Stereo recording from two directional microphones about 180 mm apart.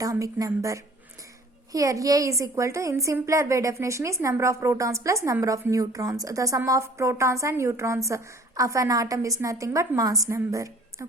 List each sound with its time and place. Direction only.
0.0 s a woman's voice: 20° right (ahead or behind)